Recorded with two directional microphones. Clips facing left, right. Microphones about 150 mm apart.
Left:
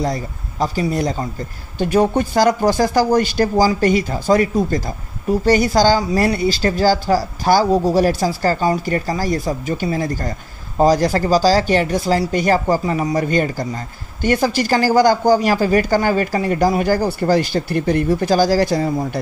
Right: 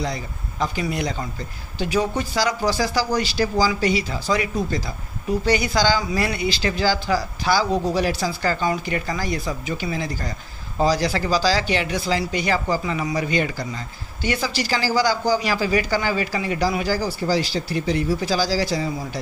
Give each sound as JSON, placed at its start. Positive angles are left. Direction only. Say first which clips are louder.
{"t": 0.0, "sound": "speech", "louder": "left 6 dB", "side_deg": 40}
{"t": 1.8, "sound": "speech", "louder": "left 7 dB", "side_deg": 50}